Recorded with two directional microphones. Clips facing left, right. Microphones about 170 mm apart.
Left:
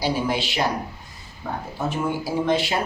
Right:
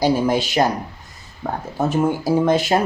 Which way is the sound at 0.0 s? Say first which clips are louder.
Right 6 dB; 45° right (ahead or behind).